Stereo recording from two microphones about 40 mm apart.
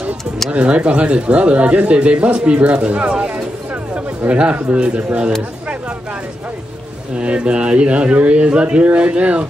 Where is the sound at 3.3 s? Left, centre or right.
Right.